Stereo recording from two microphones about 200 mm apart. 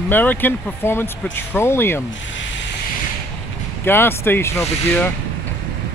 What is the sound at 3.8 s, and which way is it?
Speech, 10° left (ahead or behind).